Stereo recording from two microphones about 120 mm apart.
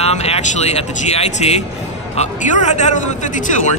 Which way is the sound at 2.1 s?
80° left.